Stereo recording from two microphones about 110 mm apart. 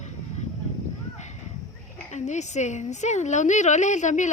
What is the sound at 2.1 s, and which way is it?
A woman's voice, 90° left.